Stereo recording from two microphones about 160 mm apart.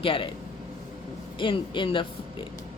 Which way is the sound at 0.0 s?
35° left (ahead or behind).